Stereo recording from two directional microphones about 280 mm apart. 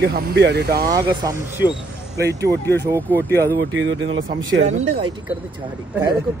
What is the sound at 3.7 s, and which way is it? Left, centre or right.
Speech, right.